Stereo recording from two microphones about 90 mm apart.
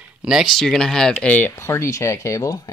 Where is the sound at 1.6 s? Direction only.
30° left (ahead or behind).